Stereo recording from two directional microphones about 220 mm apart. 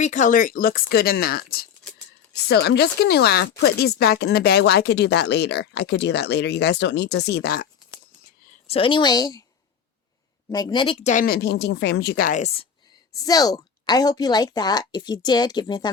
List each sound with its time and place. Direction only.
0.0 s speech: 35° left (ahead or behind)
2.5 s speech: 50° left (ahead or behind)
8.6 s speech: 25° left (ahead or behind)
10.5 s speech: 20° left (ahead or behind)
13.2 s a woman's voice: 15° left (ahead or behind)